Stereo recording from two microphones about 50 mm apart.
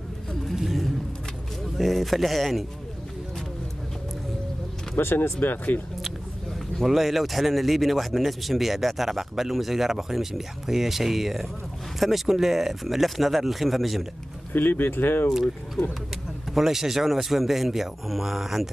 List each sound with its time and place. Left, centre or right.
0.6 s vehicle: centre
1.8 s speech: centre
4.9 s speech: left
6.8 s speech: centre
14.5 s speech: left
16.5 s speech: centre